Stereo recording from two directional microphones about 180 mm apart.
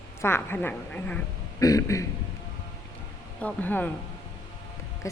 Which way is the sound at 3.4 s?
10° left (ahead or behind).